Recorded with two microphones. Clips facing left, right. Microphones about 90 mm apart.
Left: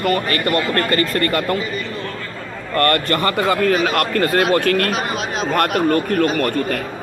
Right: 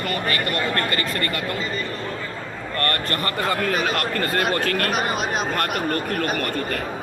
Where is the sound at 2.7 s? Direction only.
90° left.